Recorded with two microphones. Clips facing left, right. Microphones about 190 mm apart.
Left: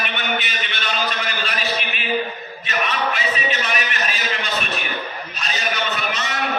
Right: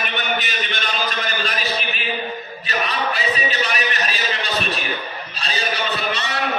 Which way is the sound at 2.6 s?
35° right (ahead or behind).